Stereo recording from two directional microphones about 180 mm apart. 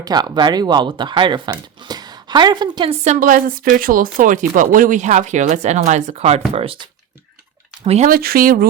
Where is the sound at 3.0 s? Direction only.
45° right (ahead or behind).